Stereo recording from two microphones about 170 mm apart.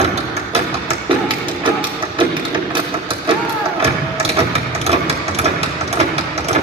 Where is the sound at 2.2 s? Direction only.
30° right (ahead or behind).